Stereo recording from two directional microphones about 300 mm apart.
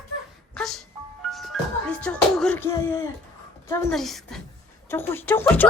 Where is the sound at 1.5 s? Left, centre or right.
Centre.